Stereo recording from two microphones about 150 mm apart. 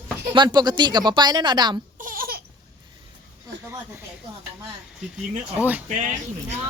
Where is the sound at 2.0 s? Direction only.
70° right (ahead or behind).